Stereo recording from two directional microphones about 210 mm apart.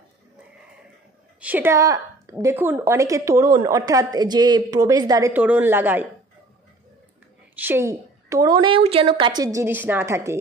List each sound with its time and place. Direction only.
1.4 s a woman's voice: 10° right (ahead or behind)
7.5 s a woman's voice: 10° right (ahead or behind)